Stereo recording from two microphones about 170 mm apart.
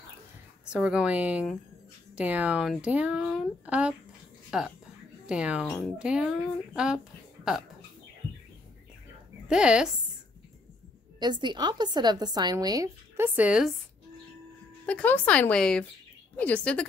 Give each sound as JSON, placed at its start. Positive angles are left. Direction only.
{"t": 0.7, "sound": "speech", "side_deg": -5}
{"t": 9.5, "sound": "speech", "side_deg": -5}
{"t": 11.1, "sound": "a woman's voice", "side_deg": -25}
{"t": 14.9, "sound": "speech", "side_deg": 10}